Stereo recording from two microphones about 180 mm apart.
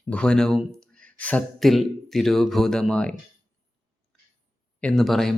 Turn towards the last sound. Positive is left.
turn(degrees=0)  # may be behind; listen again after turning